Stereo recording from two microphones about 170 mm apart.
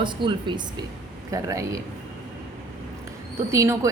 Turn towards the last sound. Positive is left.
turn(degrees=-15)  # may be behind; listen again after turning